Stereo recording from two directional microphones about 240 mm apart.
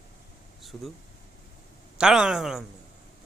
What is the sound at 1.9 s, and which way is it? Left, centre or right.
Speech, centre.